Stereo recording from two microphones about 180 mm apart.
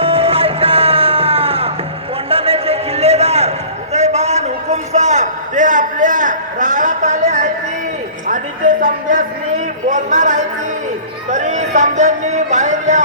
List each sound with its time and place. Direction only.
0.0 s music: 30° right (ahead or behind)
2.3 s a sound: 30° right (ahead or behind)
3.9 s a man's voice: 40° right (ahead or behind)